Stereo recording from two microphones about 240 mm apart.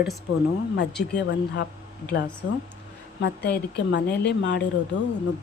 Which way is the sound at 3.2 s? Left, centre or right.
Left.